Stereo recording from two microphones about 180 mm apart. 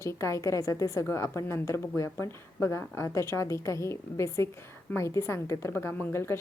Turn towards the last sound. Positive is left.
turn(degrees=15)  # may be behind; listen again after turning